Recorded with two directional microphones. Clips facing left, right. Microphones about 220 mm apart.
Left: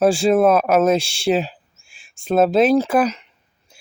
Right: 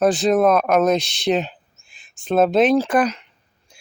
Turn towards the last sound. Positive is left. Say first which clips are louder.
# left 1 dB
turn(degrees=5)  # may be behind; listen again after turning